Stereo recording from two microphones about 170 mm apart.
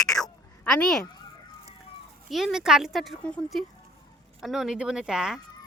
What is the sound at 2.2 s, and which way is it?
Speech, centre (ahead or behind).